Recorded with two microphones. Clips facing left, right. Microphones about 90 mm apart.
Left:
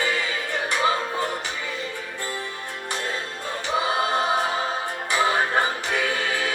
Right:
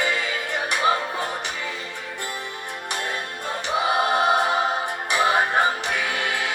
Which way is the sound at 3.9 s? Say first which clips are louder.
Right 5 dB; 15° right (ahead or behind).